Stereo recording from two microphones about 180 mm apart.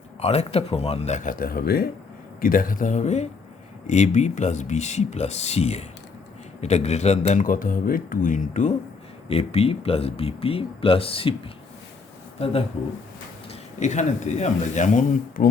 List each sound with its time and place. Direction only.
0.2 s speech: 35° left (ahead or behind)
9.3 s speech: 35° left (ahead or behind)
13.5 s speech: 40° left (ahead or behind)